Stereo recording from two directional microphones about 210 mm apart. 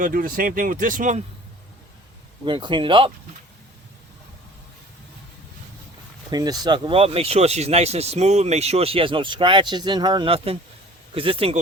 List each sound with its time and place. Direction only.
0.0 s speech: 40° right (ahead or behind)
2.4 s speech: 20° right (ahead or behind)
6.3 s speech: 20° right (ahead or behind)